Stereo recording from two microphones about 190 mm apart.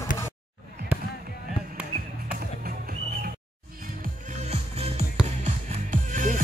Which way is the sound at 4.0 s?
40° right (ahead or behind).